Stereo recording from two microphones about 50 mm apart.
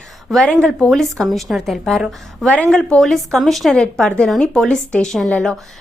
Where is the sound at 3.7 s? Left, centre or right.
Centre.